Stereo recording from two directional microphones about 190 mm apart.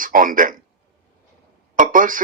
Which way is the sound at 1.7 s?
45° right (ahead or behind).